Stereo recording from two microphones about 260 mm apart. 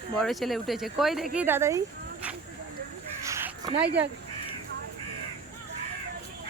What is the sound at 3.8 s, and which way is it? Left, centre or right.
Speech, right.